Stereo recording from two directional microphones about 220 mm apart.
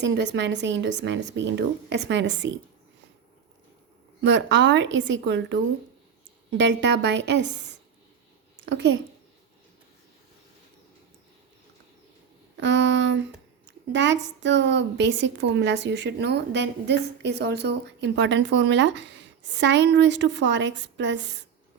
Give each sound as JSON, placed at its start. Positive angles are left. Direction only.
{"t": 0.0, "sound": "a woman's voice", "side_deg": -55}
{"t": 4.2, "sound": "a woman's voice", "side_deg": -55}
{"t": 6.6, "sound": "a woman's voice", "side_deg": -55}
{"t": 8.6, "sound": "a woman's voice", "side_deg": -55}
{"t": 12.5, "sound": "a woman's voice", "side_deg": -55}